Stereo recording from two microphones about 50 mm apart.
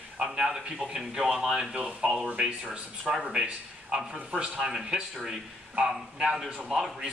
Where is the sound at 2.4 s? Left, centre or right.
Centre.